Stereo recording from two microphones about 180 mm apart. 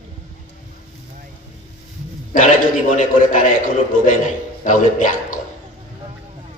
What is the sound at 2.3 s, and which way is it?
A man's voice, 45° left (ahead or behind).